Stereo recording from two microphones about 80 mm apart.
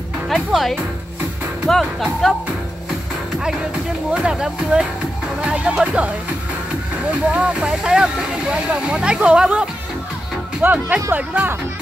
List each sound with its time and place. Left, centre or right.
0.3 s speech: centre
4.1 s speech: centre